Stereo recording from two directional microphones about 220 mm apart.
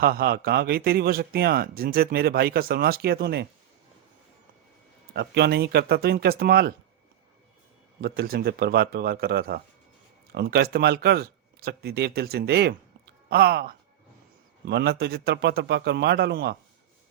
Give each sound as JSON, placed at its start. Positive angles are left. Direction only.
{"t": 0.0, "sound": "speech", "side_deg": -45}
{"t": 5.1, "sound": "speech", "side_deg": -45}
{"t": 8.0, "sound": "speech", "side_deg": -45}